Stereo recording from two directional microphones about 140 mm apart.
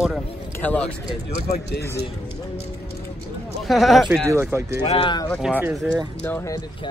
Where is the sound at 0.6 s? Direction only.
10° left (ahead or behind).